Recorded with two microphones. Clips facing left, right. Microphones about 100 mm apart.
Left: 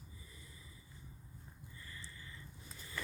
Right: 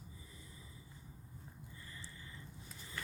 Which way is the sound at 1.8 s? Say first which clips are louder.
Left 1 dB; 20° right (ahead or behind).